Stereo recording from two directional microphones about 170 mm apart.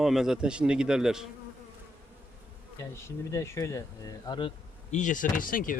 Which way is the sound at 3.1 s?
15° left (ahead or behind).